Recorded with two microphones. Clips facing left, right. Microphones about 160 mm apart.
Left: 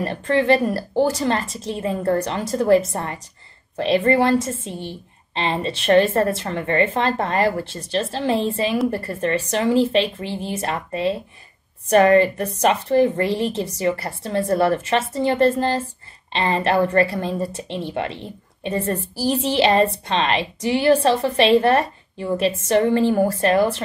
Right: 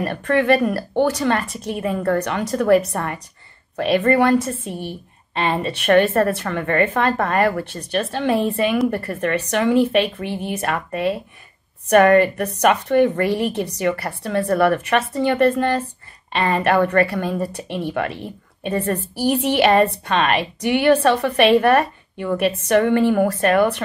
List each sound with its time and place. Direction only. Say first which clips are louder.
0.0 s speech: right 1 dB; 25° left (ahead or behind)